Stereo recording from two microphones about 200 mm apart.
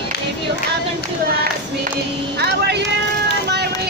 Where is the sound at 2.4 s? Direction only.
55° right (ahead or behind).